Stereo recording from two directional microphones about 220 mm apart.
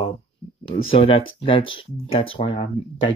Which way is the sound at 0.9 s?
25° left (ahead or behind).